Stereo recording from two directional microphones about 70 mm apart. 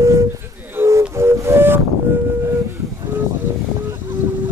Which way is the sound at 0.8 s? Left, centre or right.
Right.